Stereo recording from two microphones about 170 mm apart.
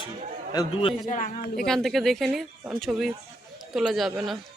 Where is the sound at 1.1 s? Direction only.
50° left (ahead or behind).